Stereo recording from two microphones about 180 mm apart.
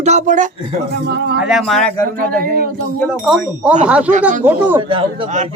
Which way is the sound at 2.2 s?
50° right (ahead or behind).